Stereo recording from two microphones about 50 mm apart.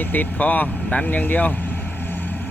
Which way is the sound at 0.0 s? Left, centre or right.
Left.